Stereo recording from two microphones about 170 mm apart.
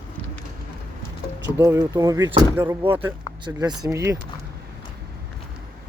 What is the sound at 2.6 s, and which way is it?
Speech, 30° right (ahead or behind).